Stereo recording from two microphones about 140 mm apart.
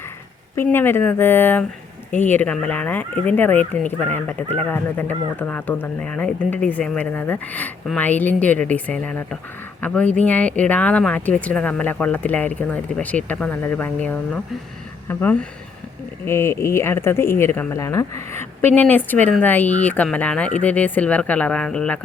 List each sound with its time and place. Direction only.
0.5 s speech: 15° left (ahead or behind)